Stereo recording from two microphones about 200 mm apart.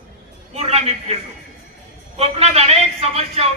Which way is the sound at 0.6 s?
30° right (ahead or behind).